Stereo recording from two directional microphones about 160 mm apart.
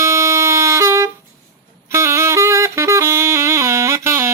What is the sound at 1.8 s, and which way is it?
Saxophone, 15° right (ahead or behind).